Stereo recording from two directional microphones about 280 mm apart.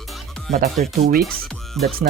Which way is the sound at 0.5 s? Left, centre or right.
Right.